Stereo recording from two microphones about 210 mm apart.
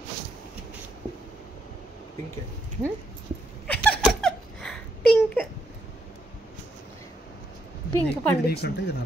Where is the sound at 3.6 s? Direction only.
5° left (ahead or behind).